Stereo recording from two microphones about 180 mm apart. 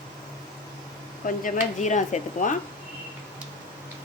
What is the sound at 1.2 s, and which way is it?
Speech, 45° left (ahead or behind).